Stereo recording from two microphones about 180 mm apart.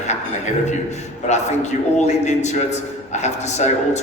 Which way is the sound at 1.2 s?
40° left (ahead or behind).